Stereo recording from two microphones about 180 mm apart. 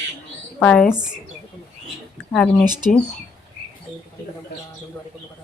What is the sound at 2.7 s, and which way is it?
Speech, 25° right (ahead or behind).